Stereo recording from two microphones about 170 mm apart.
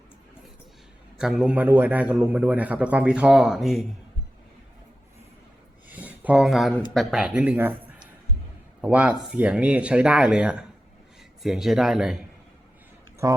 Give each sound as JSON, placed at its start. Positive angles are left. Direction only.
{"t": 1.2, "sound": "a man's voice", "side_deg": -5}
{"t": 5.9, "sound": "a sound", "side_deg": -10}
{"t": 6.9, "sound": "a man's voice", "side_deg": 0}
{"t": 13.2, "sound": "a man's voice", "side_deg": -15}